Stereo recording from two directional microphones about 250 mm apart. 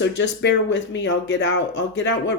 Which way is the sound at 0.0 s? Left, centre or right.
Left.